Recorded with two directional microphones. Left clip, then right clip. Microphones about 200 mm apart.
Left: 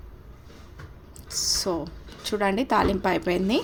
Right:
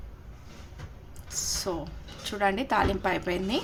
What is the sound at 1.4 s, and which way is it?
A woman's voice, 20° left (ahead or behind).